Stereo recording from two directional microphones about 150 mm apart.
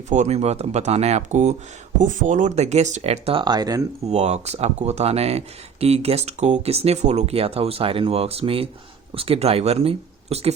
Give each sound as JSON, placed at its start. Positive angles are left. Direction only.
{"t": 0.1, "sound": "speech", "side_deg": -50}
{"t": 4.1, "sound": "speech", "side_deg": -45}